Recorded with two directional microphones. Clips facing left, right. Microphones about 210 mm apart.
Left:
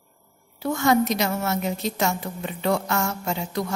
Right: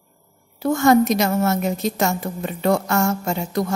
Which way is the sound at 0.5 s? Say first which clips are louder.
Right 5 dB; 45° right (ahead or behind).